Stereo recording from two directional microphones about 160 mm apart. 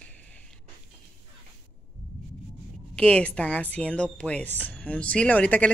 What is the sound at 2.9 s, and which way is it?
A woman's voice, 5° left (ahead or behind).